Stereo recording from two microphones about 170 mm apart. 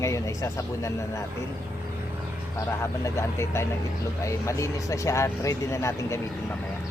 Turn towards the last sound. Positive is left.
turn(degrees=15)  # may be behind; listen again after turning